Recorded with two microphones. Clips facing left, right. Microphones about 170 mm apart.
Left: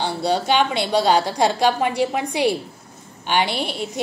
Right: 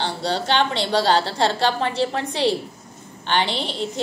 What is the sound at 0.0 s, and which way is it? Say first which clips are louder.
A woman's voice: left 3 dB; 10° left (ahead or behind).